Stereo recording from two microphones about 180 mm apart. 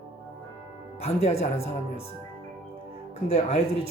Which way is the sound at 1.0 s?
35° left (ahead or behind).